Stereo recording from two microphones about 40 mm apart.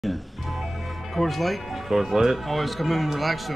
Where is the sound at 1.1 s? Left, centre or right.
Centre.